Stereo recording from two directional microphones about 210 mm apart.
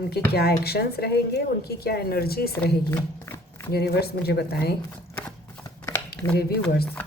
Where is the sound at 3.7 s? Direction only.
50° left (ahead or behind).